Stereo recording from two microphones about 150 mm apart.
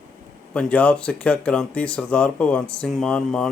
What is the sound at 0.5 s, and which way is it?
Speech, 10° left (ahead or behind).